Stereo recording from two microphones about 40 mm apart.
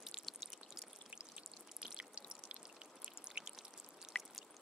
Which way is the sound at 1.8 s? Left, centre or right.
Right.